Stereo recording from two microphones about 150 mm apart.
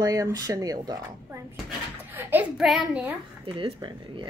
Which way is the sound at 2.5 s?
Centre (ahead or behind).